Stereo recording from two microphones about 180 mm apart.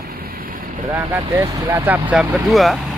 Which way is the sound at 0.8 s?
15° right (ahead or behind).